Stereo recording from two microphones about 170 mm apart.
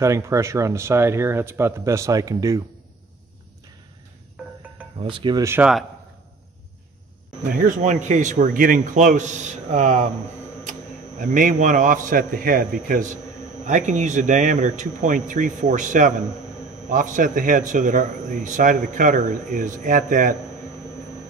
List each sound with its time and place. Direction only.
0.0 s speech: 15° right (ahead or behind)
4.9 s speech: 30° right (ahead or behind)
5.4 s speech: 15° right (ahead or behind)
7.5 s a man's voice: 50° right (ahead or behind)